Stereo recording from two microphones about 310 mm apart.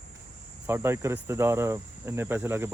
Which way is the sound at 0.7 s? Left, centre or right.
Centre.